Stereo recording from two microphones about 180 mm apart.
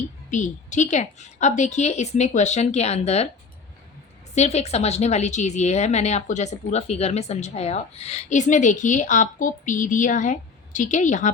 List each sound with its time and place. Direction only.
0.3 s speech: 40° left (ahead or behind)
4.4 s speech: 35° left (ahead or behind)